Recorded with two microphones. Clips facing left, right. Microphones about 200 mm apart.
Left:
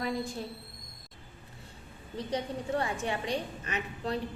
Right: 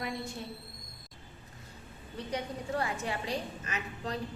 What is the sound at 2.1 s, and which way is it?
Speech, 30° left (ahead or behind).